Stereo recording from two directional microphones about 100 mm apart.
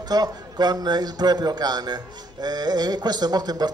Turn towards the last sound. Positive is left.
turn(degrees=-45)  # may be behind; listen again after turning